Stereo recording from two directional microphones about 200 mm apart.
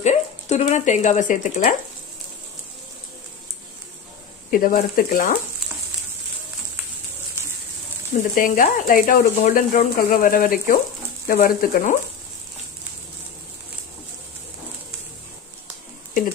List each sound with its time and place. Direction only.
0.0 s speech: 35° left (ahead or behind)
4.5 s speech: 45° left (ahead or behind)
8.4 s speech: 40° left (ahead or behind)